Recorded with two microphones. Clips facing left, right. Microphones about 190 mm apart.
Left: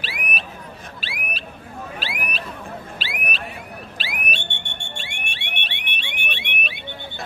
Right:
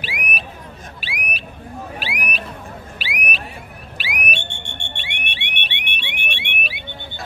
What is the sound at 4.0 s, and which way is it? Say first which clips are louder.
Alarm: right 5 dB; 15° right (ahead or behind).